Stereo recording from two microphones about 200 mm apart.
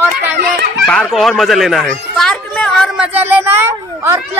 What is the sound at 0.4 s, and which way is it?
Children playing, 50° right (ahead or behind).